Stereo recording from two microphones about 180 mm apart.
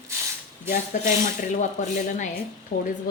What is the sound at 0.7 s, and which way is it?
Speech, 45° left (ahead or behind).